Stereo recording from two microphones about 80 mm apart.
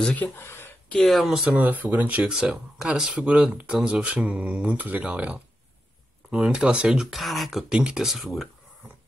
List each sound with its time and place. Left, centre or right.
0.0 s speech: centre
0.4 s speech: left
0.9 s speech: centre
1.6 s speech: right; by 8.5 s centre